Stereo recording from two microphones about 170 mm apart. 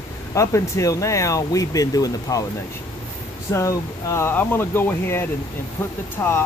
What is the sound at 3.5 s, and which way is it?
Speech, 20° left (ahead or behind).